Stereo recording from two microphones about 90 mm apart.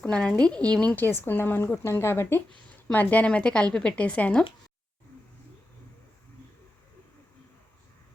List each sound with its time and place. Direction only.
0.0 s speech: 15° left (ahead or behind)
1.0 s speech: 25° left (ahead or behind)